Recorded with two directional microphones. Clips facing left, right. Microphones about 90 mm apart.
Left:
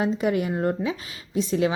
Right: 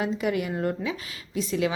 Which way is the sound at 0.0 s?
30° left (ahead or behind).